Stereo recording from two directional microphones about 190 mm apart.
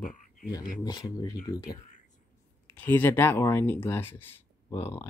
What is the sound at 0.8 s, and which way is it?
Speech, 20° left (ahead or behind).